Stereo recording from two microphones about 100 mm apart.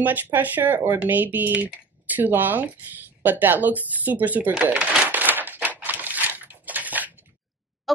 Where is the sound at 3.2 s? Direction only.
20° right (ahead or behind).